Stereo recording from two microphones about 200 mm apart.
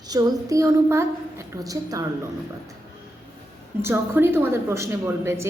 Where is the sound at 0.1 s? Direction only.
15° right (ahead or behind).